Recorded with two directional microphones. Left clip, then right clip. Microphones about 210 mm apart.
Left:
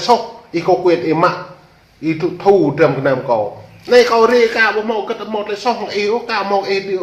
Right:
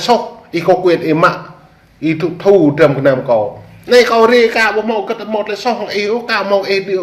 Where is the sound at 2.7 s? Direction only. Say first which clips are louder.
Right 3 dB; 10° right (ahead or behind).